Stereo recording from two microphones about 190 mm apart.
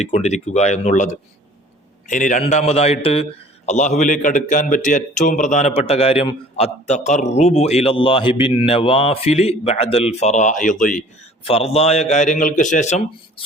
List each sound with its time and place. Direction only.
0.0 s a man's voice: 35° left (ahead or behind)
11.4 s a man's voice: 30° left (ahead or behind)